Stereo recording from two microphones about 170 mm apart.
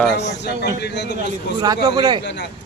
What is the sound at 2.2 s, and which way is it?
Speech, 90° left.